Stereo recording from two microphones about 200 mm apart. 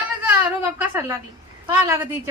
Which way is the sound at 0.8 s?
10° right (ahead or behind).